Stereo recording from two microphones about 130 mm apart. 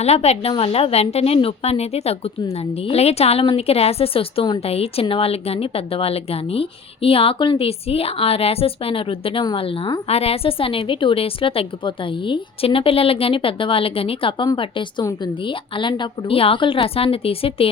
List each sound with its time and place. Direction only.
0.0 s a woman's voice: 55° left (ahead or behind)